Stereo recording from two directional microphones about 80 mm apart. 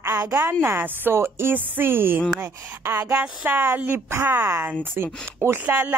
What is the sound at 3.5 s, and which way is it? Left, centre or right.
Speech, right.